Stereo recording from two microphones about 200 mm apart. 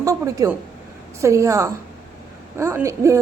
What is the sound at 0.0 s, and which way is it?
A woman's voice, 15° right (ahead or behind).